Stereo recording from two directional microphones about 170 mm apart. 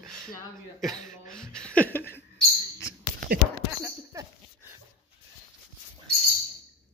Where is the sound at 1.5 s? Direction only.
5° left (ahead or behind).